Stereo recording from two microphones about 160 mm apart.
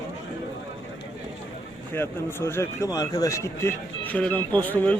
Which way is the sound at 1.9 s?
15° left (ahead or behind).